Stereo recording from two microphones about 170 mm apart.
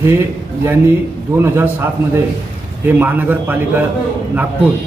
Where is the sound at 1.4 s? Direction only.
15° right (ahead or behind).